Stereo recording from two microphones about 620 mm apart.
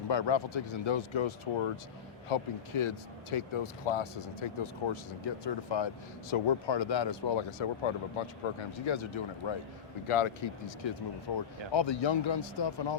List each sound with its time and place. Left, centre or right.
0.1 s a man's voice: left